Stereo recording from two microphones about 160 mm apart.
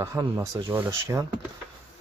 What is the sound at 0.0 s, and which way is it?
Speech, 20° right (ahead or behind).